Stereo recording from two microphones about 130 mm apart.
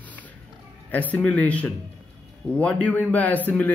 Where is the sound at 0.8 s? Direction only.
10° left (ahead or behind).